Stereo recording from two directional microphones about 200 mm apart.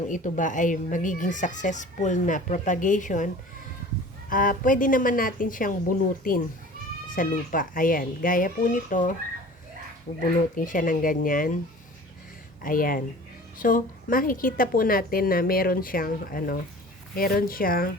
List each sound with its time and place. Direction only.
0.1 s speech: 40° left (ahead or behind)
4.3 s a woman's voice: 45° left (ahead or behind)
12.6 s a woman's voice: 45° left (ahead or behind)